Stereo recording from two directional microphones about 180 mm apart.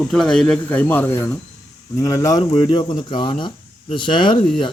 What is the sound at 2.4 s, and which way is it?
Speech, 30° left (ahead or behind).